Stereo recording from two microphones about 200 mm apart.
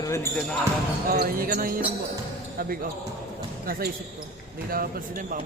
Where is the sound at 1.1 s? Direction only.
45° right (ahead or behind).